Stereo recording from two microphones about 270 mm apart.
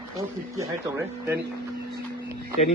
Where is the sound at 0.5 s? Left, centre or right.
Centre.